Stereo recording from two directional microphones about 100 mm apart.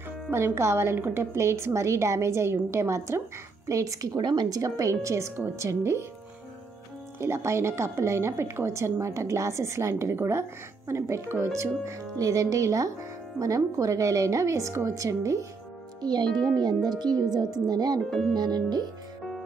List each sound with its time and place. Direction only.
0.3 s a woman's voice: 25° right (ahead or behind)
4.2 s a woman's voice: 45° right (ahead or behind); by 6.0 s 30° right (ahead or behind)
7.2 s a woman's voice: 25° right (ahead or behind)
16.0 s a child's voice: 45° right (ahead or behind)